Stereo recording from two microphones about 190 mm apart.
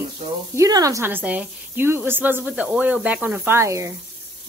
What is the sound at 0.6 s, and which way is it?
A woman's voice, 20° right (ahead or behind).